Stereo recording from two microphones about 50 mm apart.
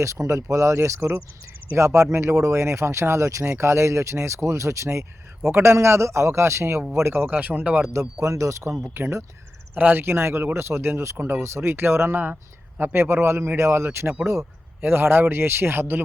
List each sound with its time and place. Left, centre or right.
0.0 s speech: right
5.5 s speech: right
7.3 s speech: right
8.2 s speech: right
9.0 s speech: right
9.7 s speech: right
10.0 s speech: right
12.2 s speech: right